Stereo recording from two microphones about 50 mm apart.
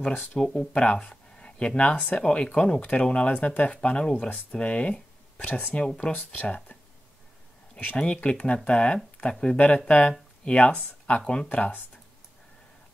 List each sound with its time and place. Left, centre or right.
0.4 s speech: centre
2.8 s speech: left
5.5 s speech: left
5.9 s speech: left
7.9 s speech: left
10.7 s speech: left
11.1 s speech: left
11.5 s speech: left